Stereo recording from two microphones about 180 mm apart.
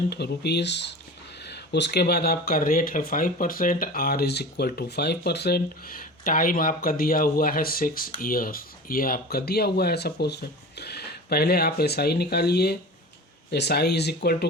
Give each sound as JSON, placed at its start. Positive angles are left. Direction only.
{"t": 0.1, "sound": "speech", "side_deg": 65}